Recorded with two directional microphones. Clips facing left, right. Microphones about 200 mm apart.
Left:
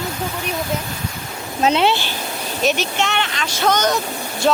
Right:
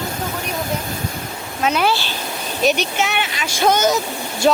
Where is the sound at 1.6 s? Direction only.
25° left (ahead or behind).